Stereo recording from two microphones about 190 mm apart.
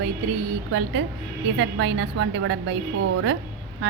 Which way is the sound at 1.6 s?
75° right (ahead or behind).